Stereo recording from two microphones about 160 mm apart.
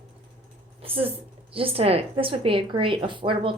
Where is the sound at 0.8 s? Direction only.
35° right (ahead or behind).